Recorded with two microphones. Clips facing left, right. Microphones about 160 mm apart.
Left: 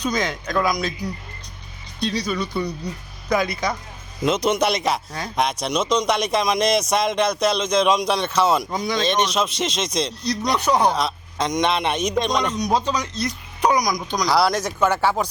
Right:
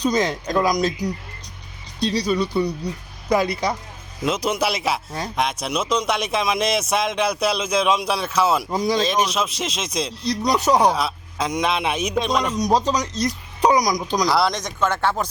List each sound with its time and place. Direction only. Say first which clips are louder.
0.0 s speech: right 3 dB; 35° right (ahead or behind)
2.0 s speech: right 3 dB; 35° right (ahead or behind)
2.5 s speech: right 3 dB; 10° right (ahead or behind)
3.2 s speech: right 2 dB; 30° right (ahead or behind)
4.2 s a man's voice: left 2 dB; 5° right (ahead or behind)
12.5 s speech: right 2 dB; 35° right (ahead or behind)
13.6 s a sound: right 2 dB; 10° right (ahead or behind)
14.3 s speech: left 5 dB; centre (ahead or behind)